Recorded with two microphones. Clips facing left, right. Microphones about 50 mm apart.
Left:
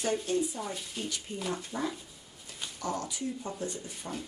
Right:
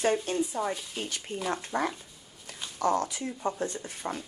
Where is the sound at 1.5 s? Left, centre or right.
Right.